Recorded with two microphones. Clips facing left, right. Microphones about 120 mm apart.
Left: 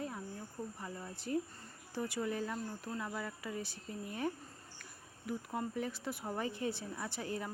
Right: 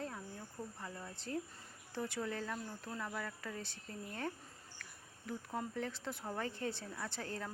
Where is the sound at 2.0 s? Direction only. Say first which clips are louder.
Left 3 dB; 5° left (ahead or behind).